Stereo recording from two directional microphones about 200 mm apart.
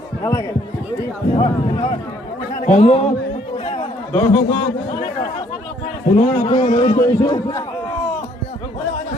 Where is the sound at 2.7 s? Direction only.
30° left (ahead or behind).